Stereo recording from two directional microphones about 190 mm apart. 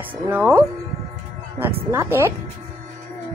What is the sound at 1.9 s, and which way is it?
Speech, 15° right (ahead or behind).